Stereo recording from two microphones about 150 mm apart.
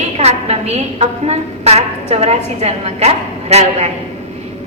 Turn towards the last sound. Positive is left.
turn(degrees=-45)  # may be behind; listen again after turning